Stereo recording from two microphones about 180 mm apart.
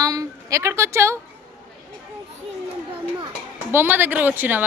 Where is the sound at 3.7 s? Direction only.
10° right (ahead or behind).